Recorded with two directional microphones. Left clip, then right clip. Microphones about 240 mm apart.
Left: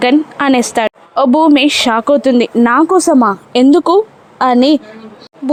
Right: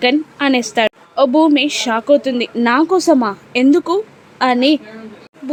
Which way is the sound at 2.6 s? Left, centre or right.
Centre.